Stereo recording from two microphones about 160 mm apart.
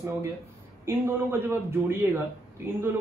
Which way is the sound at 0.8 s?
15° right (ahead or behind).